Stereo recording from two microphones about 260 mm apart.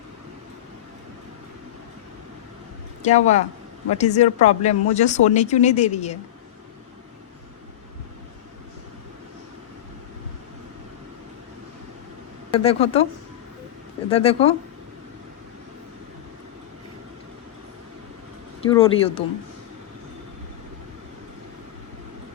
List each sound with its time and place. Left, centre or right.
3.0 s speech: left
12.5 s speech: left
14.1 s speech: left
18.6 s speech: left